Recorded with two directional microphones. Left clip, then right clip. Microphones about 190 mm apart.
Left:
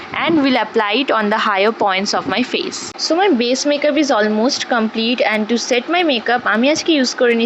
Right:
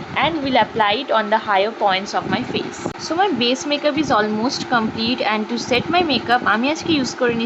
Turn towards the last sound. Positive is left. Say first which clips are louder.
# left 5 dB
turn(degrees=25)  # may be behind; listen again after turning